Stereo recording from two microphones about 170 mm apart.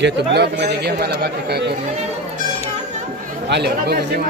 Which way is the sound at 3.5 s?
75° right (ahead or behind).